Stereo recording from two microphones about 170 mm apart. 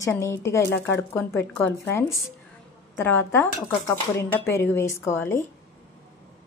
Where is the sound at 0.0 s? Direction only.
15° left (ahead or behind).